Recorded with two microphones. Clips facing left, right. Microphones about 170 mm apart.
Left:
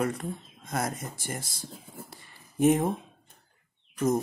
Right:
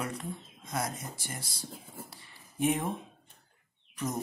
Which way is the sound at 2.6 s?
40° left (ahead or behind).